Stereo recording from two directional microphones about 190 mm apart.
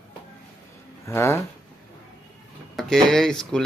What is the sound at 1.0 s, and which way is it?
Speech, 15° left (ahead or behind).